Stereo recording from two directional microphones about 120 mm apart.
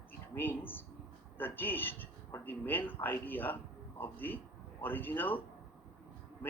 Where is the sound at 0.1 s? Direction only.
15° left (ahead or behind).